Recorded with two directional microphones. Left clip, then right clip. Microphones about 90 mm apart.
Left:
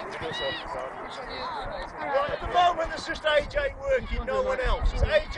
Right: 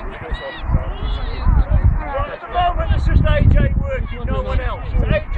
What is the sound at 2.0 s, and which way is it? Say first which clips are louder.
Speech: right 1 dB; 85° left.